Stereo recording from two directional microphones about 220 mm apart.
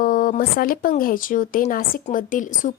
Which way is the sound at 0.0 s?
40° left (ahead or behind).